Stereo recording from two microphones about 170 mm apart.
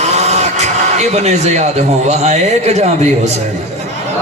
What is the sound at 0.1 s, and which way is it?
Speech, 40° right (ahead or behind).